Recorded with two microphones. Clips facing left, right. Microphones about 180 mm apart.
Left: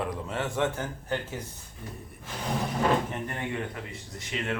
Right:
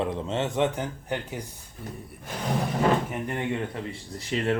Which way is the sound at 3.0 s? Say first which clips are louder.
Right 3 dB; 10° right (ahead or behind).